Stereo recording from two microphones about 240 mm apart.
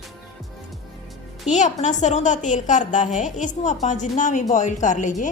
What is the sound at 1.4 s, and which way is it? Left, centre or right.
Speech, left.